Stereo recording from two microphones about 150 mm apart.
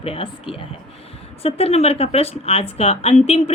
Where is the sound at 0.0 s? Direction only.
35° left (ahead or behind).